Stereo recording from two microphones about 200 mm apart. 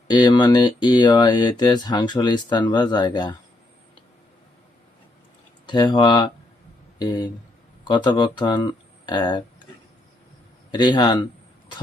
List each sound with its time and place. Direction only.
0.1 s speech: 20° left (ahead or behind)
5.6 s speech: 20° left (ahead or behind)
10.7 s speech: 20° left (ahead or behind)